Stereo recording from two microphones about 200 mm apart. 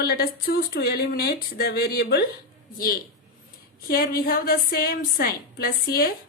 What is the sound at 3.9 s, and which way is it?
A woman's voice, 50° left (ahead or behind).